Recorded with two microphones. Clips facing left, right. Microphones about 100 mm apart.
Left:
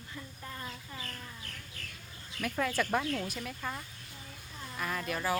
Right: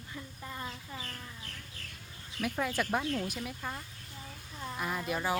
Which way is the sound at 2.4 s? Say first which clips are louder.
Left 1 dB; 15° right (ahead or behind).